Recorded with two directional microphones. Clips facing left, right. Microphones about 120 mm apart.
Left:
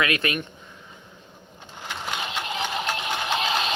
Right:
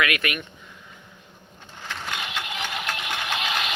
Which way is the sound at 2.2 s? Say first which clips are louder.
Left 3 dB; 30° left (ahead or behind).